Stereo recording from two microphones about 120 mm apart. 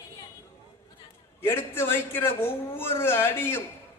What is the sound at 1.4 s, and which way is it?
A man's voice, 20° left (ahead or behind).